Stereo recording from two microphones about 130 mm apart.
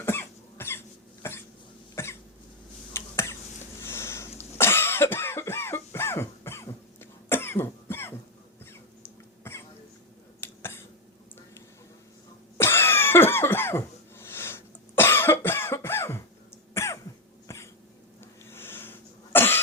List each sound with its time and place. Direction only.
0.0 s cough: 20° left (ahead or behind)
2.9 s finger snapping: 20° left (ahead or behind)
3.8 s a sound: 20° left (ahead or behind)
4.4 s cough: 20° left (ahead or behind)
9.4 s cough: 20° left (ahead or behind)
10.4 s a sound: 20° left (ahead or behind)
12.5 s cough: 20° left (ahead or behind)